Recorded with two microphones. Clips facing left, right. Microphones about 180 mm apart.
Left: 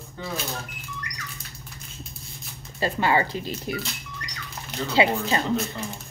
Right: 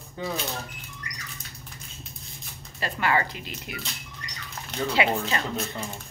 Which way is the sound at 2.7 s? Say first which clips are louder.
Left 3 dB; 25° left (ahead or behind).